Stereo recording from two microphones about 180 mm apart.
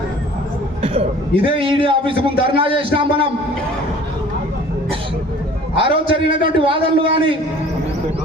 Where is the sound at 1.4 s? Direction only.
30° right (ahead or behind).